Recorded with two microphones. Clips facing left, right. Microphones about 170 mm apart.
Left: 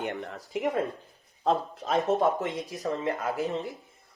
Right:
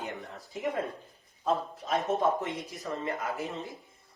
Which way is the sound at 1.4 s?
70° left (ahead or behind).